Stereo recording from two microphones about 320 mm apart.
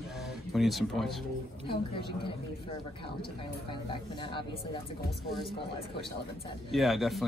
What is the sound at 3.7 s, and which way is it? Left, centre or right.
Speech, centre.